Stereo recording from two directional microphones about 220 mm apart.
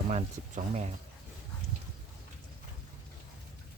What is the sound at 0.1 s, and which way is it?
Speech, 35° right (ahead or behind).